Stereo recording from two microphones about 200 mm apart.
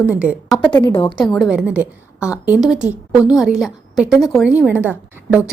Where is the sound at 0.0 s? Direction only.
5° right (ahead or behind).